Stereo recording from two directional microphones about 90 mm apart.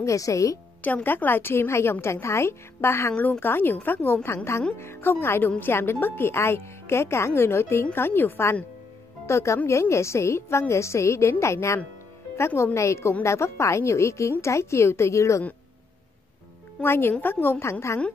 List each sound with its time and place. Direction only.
0.0 s a woman's voice: 40° left (ahead or behind)
0.8 s a woman's voice: 20° left (ahead or behind)
16.8 s speech: 25° left (ahead or behind)